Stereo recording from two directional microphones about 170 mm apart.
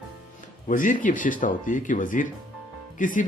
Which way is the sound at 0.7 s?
50° left (ahead or behind).